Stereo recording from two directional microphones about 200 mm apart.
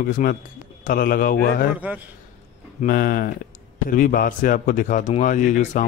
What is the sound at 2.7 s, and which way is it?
A man's voice, 45° left (ahead or behind).